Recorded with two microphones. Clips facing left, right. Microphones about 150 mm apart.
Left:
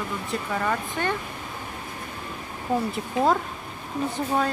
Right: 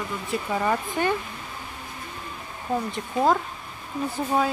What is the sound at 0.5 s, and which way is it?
Speech, 15° right (ahead or behind).